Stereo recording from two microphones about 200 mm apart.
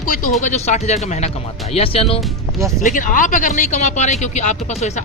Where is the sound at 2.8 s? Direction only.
40° left (ahead or behind).